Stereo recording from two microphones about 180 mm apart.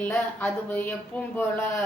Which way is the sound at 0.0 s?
10° left (ahead or behind).